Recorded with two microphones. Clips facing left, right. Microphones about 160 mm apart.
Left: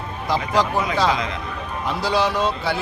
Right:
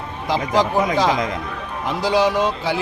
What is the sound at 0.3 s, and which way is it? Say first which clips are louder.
Speech: right 2 dB; 15° right (ahead or behind).